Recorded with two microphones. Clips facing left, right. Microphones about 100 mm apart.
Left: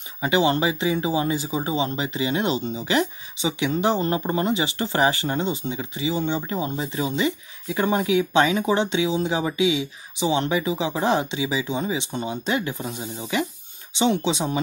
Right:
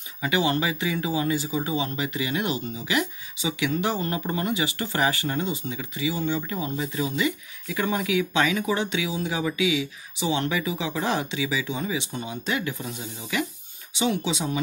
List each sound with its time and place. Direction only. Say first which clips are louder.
0.2 s speech: left 4 dB; 25° left (ahead or behind)